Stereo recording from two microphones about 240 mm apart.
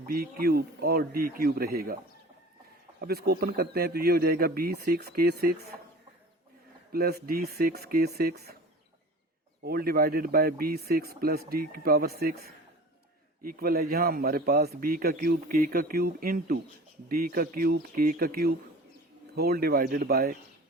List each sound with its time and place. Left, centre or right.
0.0 s a man's voice: right
3.0 s a man's voice: right
6.9 s a man's voice: right
9.6 s a man's voice: right